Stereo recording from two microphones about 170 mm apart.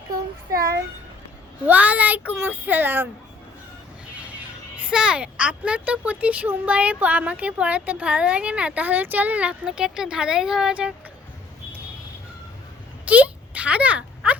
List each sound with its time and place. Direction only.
1.6 s speech: 10° right (ahead or behind)
4.2 s speech: 10° right (ahead or behind)
13.1 s a sound: 10° right (ahead or behind)